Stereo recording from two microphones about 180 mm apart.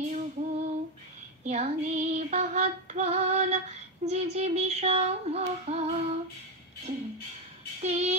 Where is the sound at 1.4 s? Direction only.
40° right (ahead or behind).